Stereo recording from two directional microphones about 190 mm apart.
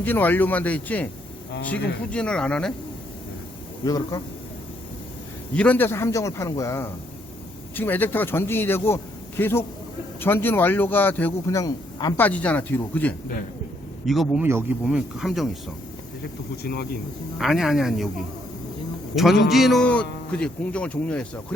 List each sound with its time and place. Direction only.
0.0 s a man's voice: 10° left (ahead or behind)
2.1 s speech: 5° left (ahead or behind)
3.8 s speech: 20° left (ahead or behind)
5.5 s a man's voice: 10° left (ahead or behind)
12.2 s a man's voice: 10° left (ahead or behind)
14.4 s speech: 10° right (ahead or behind)
17.3 s speech: centre (ahead or behind)
19.1 s speech: centre (ahead or behind)